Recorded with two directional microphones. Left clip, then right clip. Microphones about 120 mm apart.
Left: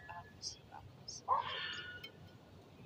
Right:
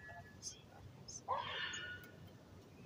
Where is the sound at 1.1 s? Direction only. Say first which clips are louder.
Left 4 dB; 40° right (ahead or behind).